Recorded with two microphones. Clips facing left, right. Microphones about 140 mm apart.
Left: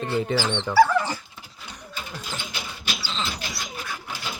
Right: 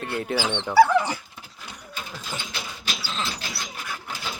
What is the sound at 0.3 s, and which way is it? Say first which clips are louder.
Speech: right 2 dB; 15° right (ahead or behind).